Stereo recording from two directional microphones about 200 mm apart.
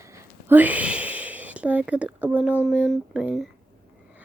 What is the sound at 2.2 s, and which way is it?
Speech, 5° right (ahead or behind).